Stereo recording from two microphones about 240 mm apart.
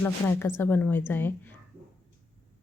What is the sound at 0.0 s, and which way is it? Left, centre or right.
Speech, centre.